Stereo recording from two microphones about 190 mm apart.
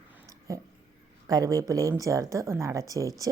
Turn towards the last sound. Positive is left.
turn(degrees=-20)  # may be behind; listen again after turning